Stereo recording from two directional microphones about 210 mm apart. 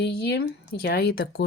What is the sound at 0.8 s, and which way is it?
Speech, 50° left (ahead or behind).